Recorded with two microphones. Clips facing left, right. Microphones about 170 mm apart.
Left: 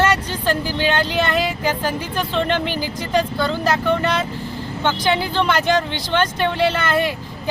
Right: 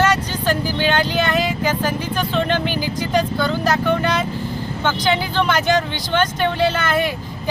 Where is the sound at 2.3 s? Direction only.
Centre (ahead or behind).